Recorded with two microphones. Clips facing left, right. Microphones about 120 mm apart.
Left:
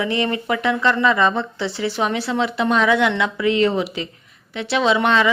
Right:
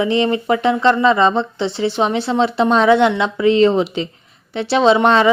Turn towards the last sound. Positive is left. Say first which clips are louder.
# right 5 dB
turn(degrees=-35)  # may be behind; listen again after turning